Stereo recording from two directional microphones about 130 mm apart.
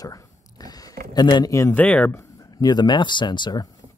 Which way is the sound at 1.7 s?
10° left (ahead or behind).